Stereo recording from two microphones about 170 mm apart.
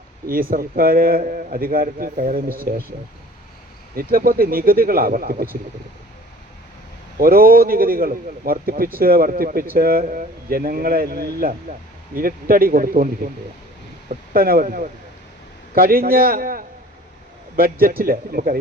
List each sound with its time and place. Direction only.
0.5 s speech: 60° right (ahead or behind)
3.9 s speech: 60° right (ahead or behind)
7.2 s speech: 60° right (ahead or behind)
14.1 s speech: 60° right (ahead or behind)